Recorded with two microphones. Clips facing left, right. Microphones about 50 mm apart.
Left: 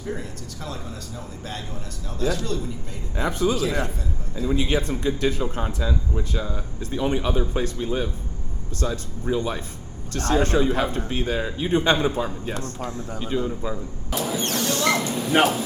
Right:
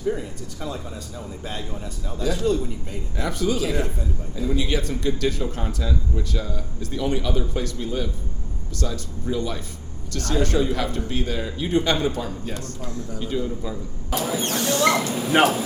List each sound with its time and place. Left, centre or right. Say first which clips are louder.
0.1 s speech: right 3 dB; centre
3.2 s speech: left 1 dB; left
14.1 s speech: right 1 dB; centre